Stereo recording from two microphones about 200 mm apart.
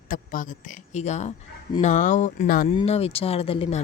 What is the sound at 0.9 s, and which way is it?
Speech, 35° left (ahead or behind).